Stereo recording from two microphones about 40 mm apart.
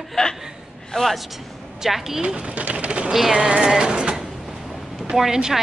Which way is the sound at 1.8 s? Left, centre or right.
Centre.